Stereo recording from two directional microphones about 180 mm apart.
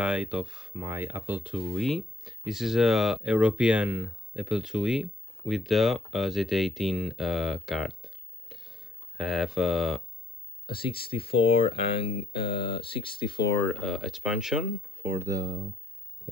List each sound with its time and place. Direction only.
0.0 s speech: 5° right (ahead or behind)
10.7 s speech: 30° left (ahead or behind)
13.6 s speech: 5° left (ahead or behind); by 15.5 s 20° right (ahead or behind)